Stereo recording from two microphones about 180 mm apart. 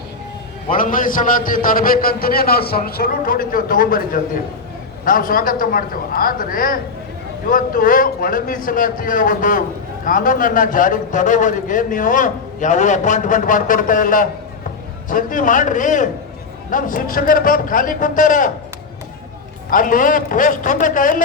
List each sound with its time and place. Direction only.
0.7 s a man's voice: 50° left (ahead or behind)
19.7 s a man's voice: 50° left (ahead or behind)